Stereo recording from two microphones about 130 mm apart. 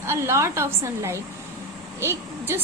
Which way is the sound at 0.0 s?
20° right (ahead or behind).